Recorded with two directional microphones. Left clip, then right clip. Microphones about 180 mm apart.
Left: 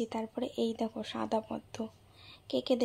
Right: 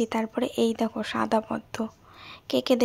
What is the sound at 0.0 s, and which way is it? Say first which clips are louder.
Speech: right 9 dB; 25° right (ahead or behind).